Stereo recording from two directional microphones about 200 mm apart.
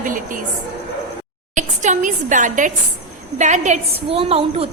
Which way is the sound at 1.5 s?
40° right (ahead or behind).